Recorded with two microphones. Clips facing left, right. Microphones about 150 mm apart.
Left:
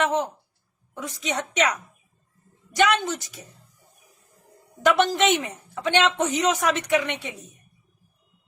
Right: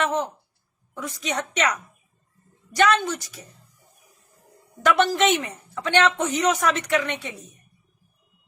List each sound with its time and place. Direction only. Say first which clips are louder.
0.0 s a woman's voice: left 1 dB; 20° left (ahead or behind)
4.8 s speech: even; 15° left (ahead or behind)